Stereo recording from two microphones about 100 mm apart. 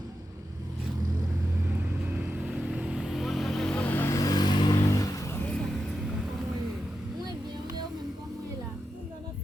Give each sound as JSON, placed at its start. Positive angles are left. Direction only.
{"t": 2.1, "sound": "vehicle", "side_deg": -10}
{"t": 4.2, "sound": "vehicle", "side_deg": 40}
{"t": 4.9, "sound": "vehicle", "side_deg": 35}